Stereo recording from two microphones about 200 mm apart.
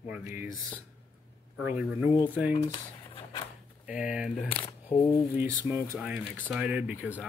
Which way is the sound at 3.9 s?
5° right (ahead or behind).